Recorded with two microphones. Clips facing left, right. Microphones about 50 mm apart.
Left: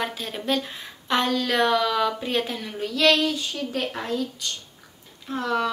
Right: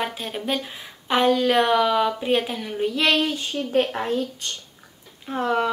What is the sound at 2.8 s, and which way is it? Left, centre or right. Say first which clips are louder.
A child's voice: even; right.